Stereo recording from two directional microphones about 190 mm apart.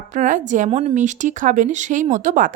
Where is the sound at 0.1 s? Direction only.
40° right (ahead or behind).